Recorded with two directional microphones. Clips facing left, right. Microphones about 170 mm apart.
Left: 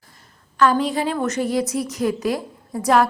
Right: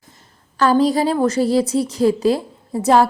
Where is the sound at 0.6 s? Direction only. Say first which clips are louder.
Right 4 dB; 35° right (ahead or behind).